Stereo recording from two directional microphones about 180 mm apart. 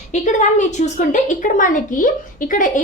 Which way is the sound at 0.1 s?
40° left (ahead or behind).